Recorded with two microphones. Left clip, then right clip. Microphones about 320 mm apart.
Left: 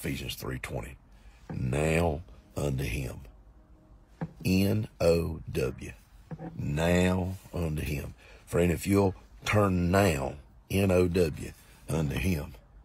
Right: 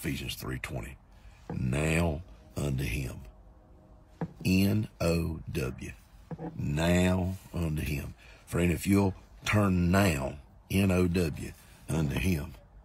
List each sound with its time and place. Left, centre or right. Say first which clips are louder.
0.0 s speech: left 1 dB; centre
4.4 s speech: left 1 dB; centre
6.2 s speech: right 1 dB; centre